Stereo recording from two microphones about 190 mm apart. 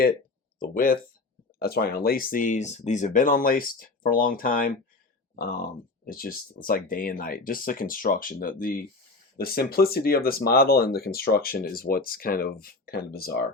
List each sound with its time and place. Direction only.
0.6 s speech: 50° left (ahead or behind)